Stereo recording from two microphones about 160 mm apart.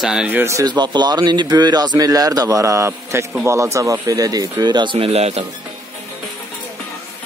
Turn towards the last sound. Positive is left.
turn(degrees=-40)  # may be behind; listen again after turning